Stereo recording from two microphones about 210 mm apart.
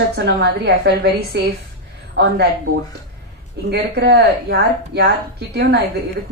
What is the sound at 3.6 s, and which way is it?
A woman's voice, 50° right (ahead or behind).